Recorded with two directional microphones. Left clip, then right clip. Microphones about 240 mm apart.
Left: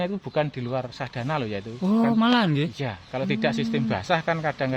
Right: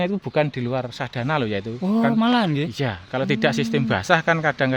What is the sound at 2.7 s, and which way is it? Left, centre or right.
Speech, right.